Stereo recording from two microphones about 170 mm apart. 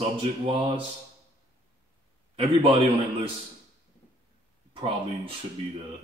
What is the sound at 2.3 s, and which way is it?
Speech, 35° right (ahead or behind).